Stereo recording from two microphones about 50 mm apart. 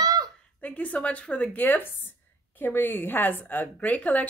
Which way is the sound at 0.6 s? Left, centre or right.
Left.